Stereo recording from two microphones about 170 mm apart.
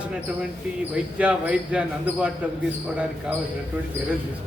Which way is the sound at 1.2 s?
5° right (ahead or behind).